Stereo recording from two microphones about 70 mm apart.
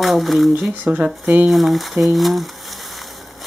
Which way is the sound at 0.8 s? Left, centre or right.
Right.